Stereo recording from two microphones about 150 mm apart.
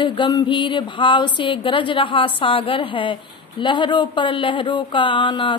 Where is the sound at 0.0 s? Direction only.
30° left (ahead or behind).